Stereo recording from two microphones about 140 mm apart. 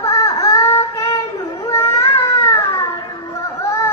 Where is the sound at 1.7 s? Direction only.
20° left (ahead or behind).